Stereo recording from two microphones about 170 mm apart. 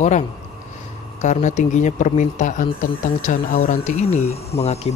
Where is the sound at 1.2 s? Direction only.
45° left (ahead or behind).